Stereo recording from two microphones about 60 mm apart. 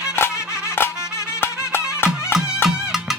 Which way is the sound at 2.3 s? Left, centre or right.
Centre.